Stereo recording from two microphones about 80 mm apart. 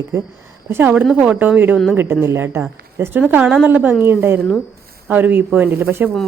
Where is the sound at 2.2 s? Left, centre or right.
Right.